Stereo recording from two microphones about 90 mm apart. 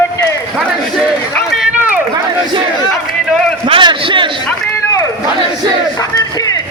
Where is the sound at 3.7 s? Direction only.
65° right (ahead or behind).